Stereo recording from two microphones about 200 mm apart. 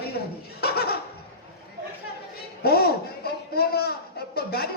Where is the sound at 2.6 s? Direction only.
50° left (ahead or behind).